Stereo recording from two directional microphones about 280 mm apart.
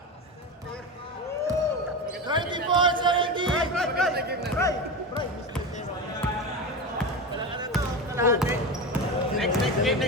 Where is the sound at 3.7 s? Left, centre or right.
Centre.